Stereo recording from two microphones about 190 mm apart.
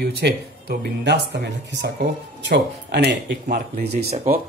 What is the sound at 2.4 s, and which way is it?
Speech, 65° right (ahead or behind).